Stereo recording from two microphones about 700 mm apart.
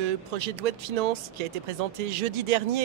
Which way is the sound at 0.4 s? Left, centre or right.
Right.